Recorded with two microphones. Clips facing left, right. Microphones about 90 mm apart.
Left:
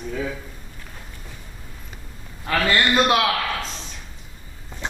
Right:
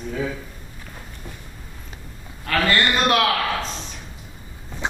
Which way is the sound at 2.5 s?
15° left (ahead or behind).